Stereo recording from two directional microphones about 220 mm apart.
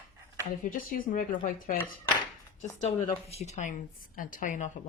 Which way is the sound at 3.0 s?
30° left (ahead or behind).